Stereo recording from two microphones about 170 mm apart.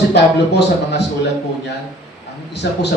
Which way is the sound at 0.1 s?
80° left.